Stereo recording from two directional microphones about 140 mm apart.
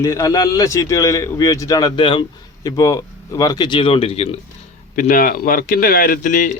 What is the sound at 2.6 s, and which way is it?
Speech, 25° left (ahead or behind).